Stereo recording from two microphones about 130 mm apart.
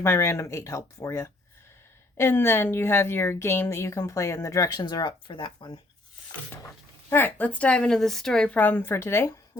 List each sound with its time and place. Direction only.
0.0 s a woman's voice: 20° left (ahead or behind); by 5.8 s 40° left (ahead or behind)
7.1 s a woman's voice: 15° left (ahead or behind)